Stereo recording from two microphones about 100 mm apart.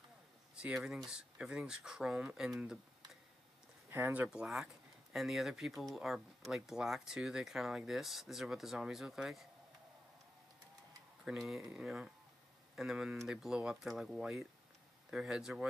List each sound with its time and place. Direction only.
0.6 s speech: 5° right (ahead or behind)
3.9 s speech: 20° right (ahead or behind)
4.3 s speech: centre (ahead or behind)
11.2 s speech: centre (ahead or behind)